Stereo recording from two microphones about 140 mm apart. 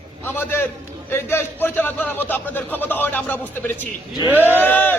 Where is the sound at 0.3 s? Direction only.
15° left (ahead or behind).